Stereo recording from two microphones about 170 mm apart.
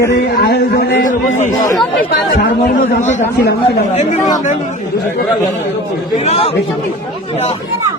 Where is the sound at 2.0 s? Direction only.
65° left (ahead or behind).